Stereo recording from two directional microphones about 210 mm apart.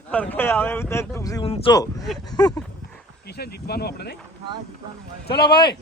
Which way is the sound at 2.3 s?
20° left (ahead or behind).